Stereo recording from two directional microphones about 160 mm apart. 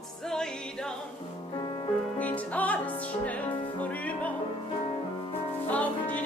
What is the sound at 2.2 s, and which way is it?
Music, 10° left (ahead or behind).